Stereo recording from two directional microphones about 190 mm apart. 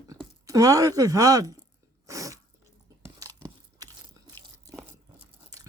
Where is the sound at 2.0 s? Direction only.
15° right (ahead or behind).